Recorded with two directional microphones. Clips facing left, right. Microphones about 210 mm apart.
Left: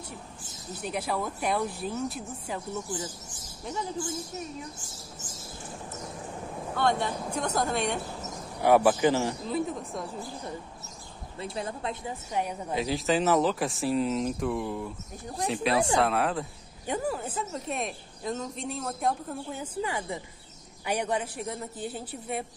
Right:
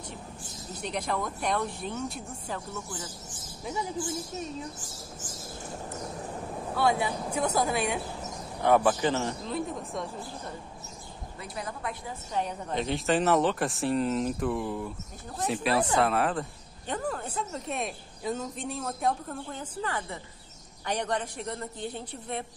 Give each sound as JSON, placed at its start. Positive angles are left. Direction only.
{"t": 0.7, "sound": "speech", "side_deg": 5}
{"t": 2.5, "sound": "speech", "side_deg": 15}
{"t": 6.7, "sound": "speech", "side_deg": -5}
{"t": 8.6, "sound": "speech", "side_deg": 10}
{"t": 11.4, "sound": "speech", "side_deg": 25}
{"t": 12.3, "sound": "a woman's voice", "side_deg": 10}